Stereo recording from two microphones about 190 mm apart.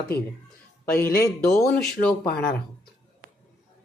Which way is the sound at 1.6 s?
5° left (ahead or behind).